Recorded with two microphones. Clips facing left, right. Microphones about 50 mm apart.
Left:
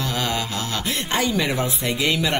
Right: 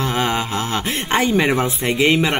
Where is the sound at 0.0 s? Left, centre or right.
Right.